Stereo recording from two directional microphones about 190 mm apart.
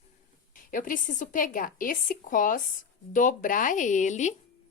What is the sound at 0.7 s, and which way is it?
A woman's voice, 45° left (ahead or behind).